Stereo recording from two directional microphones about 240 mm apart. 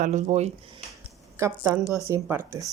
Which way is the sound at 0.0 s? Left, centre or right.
Right.